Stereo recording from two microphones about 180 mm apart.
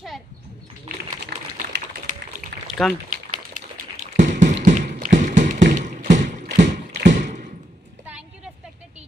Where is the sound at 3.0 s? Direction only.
45° right (ahead or behind).